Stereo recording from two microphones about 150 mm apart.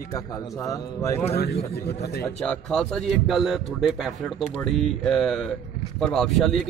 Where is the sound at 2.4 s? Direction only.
5° left (ahead or behind).